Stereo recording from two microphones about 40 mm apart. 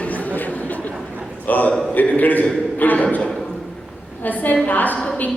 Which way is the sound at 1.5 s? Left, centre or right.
Left.